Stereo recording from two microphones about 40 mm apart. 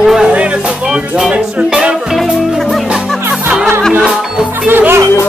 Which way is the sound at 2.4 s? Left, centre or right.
Centre.